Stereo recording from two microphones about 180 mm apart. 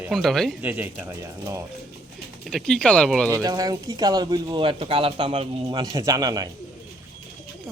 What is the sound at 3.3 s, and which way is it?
Speech, 20° right (ahead or behind).